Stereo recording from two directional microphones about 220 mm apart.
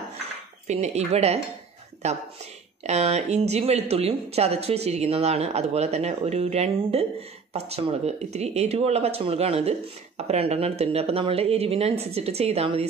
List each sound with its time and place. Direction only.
0.7 s speech: 30° right (ahead or behind)